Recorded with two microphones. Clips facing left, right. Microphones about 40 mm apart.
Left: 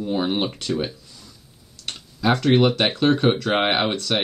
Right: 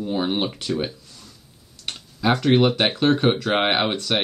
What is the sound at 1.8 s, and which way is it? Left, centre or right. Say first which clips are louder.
Speech: even; centre.